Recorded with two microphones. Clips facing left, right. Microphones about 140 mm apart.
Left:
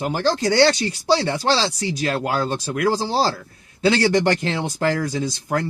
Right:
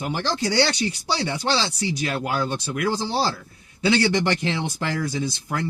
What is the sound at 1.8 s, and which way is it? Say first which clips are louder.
Speech: left 3 dB; 45° left (ahead or behind).